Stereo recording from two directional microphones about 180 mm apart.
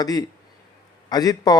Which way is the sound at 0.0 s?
20° left (ahead or behind).